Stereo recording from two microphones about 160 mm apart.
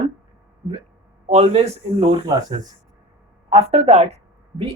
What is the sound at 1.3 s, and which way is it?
Speech, 40° right (ahead or behind).